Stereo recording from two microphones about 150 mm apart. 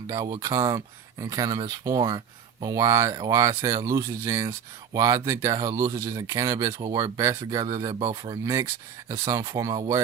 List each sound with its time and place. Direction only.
0.1 s speech: 20° right (ahead or behind)